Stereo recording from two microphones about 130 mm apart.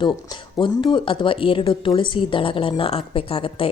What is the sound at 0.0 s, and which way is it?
A woman's voice, 35° left (ahead or behind).